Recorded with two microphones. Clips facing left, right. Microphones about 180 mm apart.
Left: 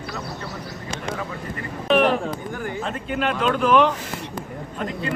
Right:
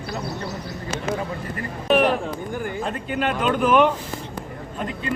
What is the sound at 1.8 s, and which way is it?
Speech, 5° right (ahead or behind).